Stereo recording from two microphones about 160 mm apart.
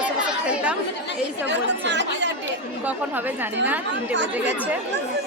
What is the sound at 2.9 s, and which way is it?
Speech, 10° right (ahead or behind).